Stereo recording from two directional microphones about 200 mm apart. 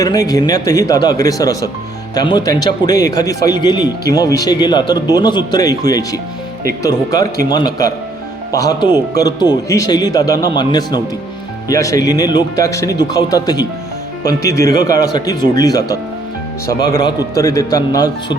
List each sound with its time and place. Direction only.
0.0 s speech: 15° left (ahead or behind)